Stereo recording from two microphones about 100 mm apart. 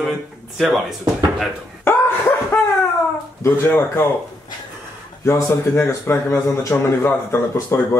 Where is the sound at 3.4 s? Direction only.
20° left (ahead or behind).